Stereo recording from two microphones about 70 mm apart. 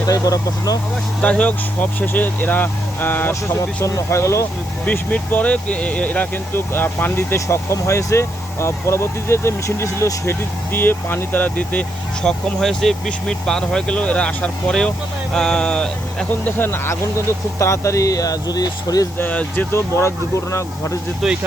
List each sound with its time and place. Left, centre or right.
0.1 s speech: left
1.2 s speech: centre
3.8 s speech: left
4.9 s speech: left
7.3 s speech: left; by 11.9 s centre
12.2 s speech: centre
16.4 s speech: left
19.2 s speech: left
19.7 s speech: left
21.2 s speech: centre